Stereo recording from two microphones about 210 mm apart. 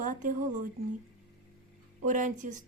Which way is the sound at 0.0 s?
40° right (ahead or behind).